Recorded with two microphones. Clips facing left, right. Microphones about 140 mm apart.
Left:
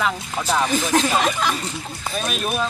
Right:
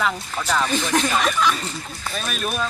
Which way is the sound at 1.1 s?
35° left (ahead or behind).